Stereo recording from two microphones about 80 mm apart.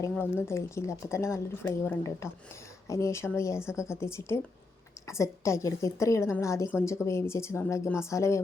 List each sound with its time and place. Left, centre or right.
0.2 s speech: left